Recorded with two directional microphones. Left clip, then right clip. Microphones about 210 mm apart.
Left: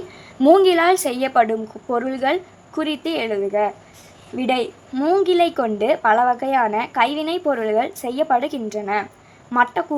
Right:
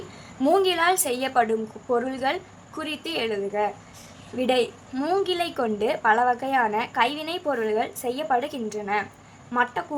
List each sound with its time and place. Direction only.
0.4 s a woman's voice: 30° left (ahead or behind)